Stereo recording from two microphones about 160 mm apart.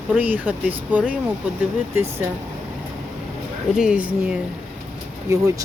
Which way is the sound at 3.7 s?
5° right (ahead or behind).